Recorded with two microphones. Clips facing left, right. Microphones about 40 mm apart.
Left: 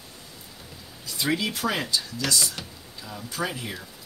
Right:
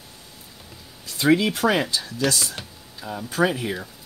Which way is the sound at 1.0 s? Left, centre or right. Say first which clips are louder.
Right 7 dB; right.